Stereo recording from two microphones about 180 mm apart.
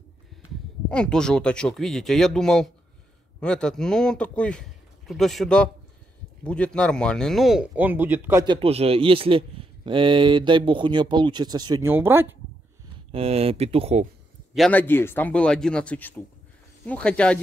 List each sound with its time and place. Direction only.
0.8 s speech: 5° left (ahead or behind); by 8.5 s 10° right (ahead or behind)
8.5 s speech: 30° right (ahead or behind); by 12.3 s 10° right (ahead or behind)
13.1 s speech: 35° right (ahead or behind)
14.5 s a man's voice: 5° left (ahead or behind)